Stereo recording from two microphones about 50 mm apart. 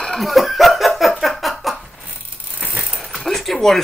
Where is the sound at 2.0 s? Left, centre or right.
Right.